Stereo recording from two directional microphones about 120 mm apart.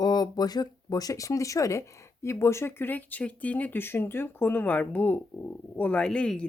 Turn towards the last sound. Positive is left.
turn(degrees=5)  # may be behind; listen again after turning